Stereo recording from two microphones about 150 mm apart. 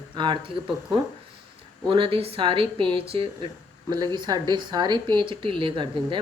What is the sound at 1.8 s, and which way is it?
Speech, 35° right (ahead or behind).